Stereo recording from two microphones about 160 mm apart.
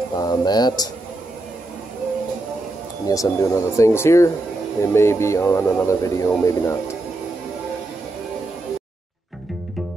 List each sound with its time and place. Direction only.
0.1 s speech: 25° left (ahead or behind)
3.1 s speech: 20° left (ahead or behind)